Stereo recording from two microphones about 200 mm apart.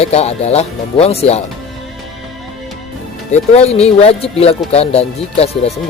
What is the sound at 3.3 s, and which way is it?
Speech, 30° left (ahead or behind).